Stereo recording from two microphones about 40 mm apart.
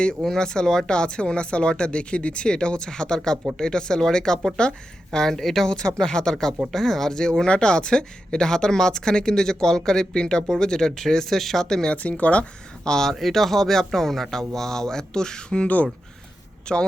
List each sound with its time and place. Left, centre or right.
0.3 s speech: centre
6.7 s speech: centre
11.9 s speech: left
12.8 s speech: centre
13.1 s speech: centre; by 15.6 s left
15.6 s speech: left
16.7 s speech: left